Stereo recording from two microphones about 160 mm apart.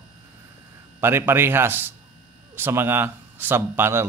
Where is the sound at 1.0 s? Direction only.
15° right (ahead or behind).